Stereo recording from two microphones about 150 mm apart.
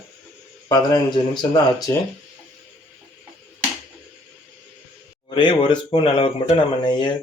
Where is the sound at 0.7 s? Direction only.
25° left (ahead or behind).